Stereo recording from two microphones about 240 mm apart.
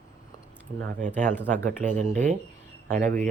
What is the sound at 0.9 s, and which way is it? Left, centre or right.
Speech, right.